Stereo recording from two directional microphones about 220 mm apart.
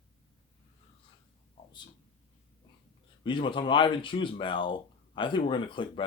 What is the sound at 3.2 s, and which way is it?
Speech, 20° left (ahead or behind).